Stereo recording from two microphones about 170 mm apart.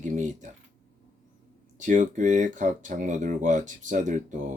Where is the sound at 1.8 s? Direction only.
45° right (ahead or behind).